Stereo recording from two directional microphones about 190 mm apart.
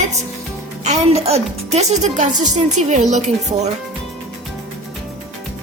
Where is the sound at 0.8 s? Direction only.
35° right (ahead or behind).